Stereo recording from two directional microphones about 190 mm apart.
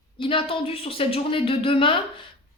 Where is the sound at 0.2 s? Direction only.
30° left (ahead or behind).